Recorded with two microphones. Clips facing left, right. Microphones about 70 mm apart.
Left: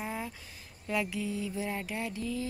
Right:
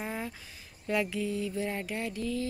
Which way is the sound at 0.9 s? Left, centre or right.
Centre.